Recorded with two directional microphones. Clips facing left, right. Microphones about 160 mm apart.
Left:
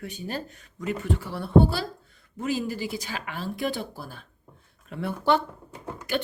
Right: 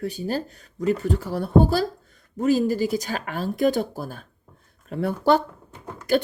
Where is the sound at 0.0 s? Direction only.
35° right (ahead or behind).